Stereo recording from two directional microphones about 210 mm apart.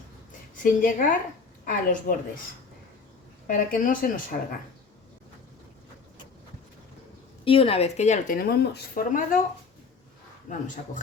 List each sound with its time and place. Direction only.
0.5 s a woman's voice: 40° left (ahead or behind)
3.4 s speech: 40° left (ahead or behind)
7.4 s speech: 25° left (ahead or behind); by 9.4 s 40° left (ahead or behind)
10.5 s speech: 35° left (ahead or behind)